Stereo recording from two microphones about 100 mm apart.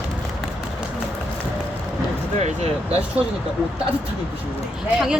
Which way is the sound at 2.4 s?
90° right.